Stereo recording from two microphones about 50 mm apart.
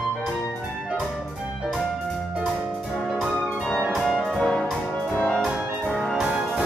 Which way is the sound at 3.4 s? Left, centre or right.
Centre.